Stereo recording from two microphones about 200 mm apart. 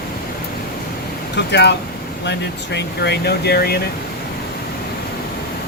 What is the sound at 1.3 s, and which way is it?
Speech, 60° left (ahead or behind).